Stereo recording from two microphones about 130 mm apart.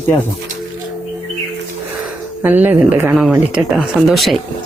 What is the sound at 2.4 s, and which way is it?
Speech, 15° right (ahead or behind).